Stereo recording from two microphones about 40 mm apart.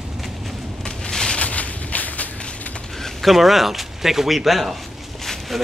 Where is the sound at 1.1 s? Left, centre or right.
Centre.